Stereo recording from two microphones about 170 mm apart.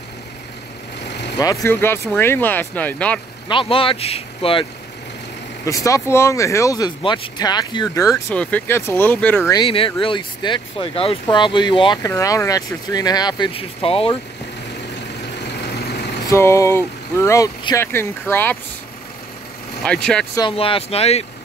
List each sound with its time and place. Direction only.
1.4 s speech: 20° left (ahead or behind)
3.4 s speech: 30° left (ahead or behind)
5.7 s speech: 20° left (ahead or behind)
8.4 s speech: 10° left (ahead or behind)
9.6 s speech: 30° left (ahead or behind)
15.4 s vehicle: 75° left (ahead or behind)
16.3 s speech: 15° left (ahead or behind)
19.8 s speech: 5° left (ahead or behind)
20.3 s speech: 30° left (ahead or behind)